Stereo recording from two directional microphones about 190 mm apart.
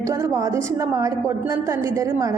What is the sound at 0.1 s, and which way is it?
A woman's voice, 15° right (ahead or behind).